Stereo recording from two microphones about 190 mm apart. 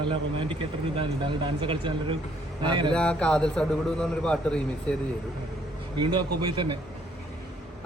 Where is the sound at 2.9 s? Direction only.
5° left (ahead or behind).